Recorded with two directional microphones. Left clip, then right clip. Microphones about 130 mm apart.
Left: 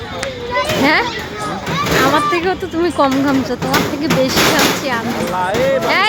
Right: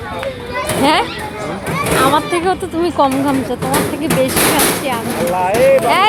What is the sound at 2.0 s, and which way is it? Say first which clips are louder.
Speech: even; 15° left (ahead or behind).